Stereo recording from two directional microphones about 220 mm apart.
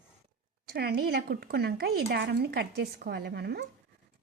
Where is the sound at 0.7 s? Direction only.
45° right (ahead or behind).